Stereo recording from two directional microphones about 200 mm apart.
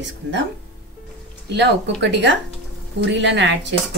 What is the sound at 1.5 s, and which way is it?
Speech, 60° right (ahead or behind).